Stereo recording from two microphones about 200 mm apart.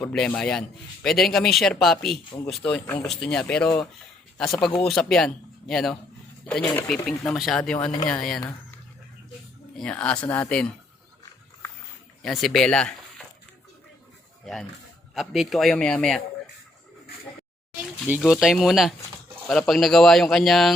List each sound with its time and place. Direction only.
0.0 s speech: 5° left (ahead or behind)
4.9 s speech: centre (ahead or behind)
9.7 s speech: 5° left (ahead or behind)
12.2 s speech: centre (ahead or behind)
14.4 s speech: centre (ahead or behind)
18.2 s speech: centre (ahead or behind)